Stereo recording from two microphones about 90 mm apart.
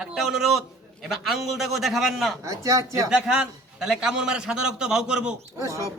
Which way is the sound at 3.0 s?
5° right (ahead or behind).